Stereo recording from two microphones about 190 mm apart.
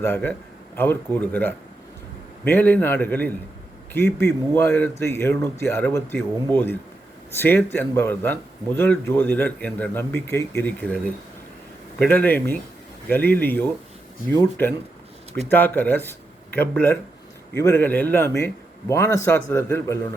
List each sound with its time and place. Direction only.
0.0 s a man's voice: 10° left (ahead or behind)